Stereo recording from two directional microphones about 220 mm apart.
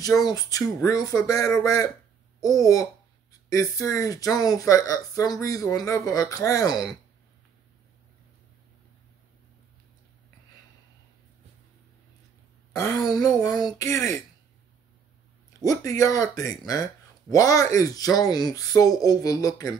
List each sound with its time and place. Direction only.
0.2 s speech: 15° left (ahead or behind)
12.7 s a woman's voice: 15° left (ahead or behind)
15.6 s speech: 15° left (ahead or behind)